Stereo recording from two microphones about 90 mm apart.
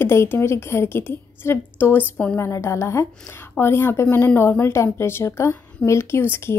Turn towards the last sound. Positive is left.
turn(degrees=25)  # may be behind; listen again after turning